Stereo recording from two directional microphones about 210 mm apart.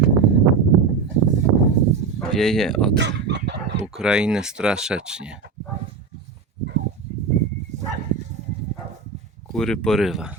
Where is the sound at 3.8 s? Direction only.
5° right (ahead or behind).